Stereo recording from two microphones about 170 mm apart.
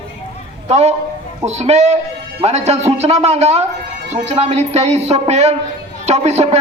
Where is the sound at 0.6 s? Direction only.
40° right (ahead or behind).